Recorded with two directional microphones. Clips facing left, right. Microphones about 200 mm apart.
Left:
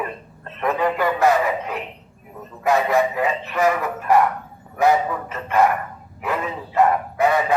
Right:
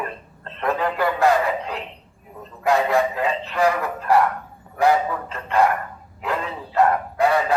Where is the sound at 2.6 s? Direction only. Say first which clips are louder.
Left 1 dB; 15° left (ahead or behind).